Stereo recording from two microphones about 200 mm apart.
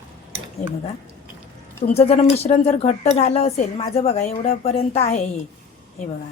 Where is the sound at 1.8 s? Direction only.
30° left (ahead or behind).